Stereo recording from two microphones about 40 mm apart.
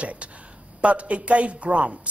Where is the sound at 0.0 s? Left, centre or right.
Right.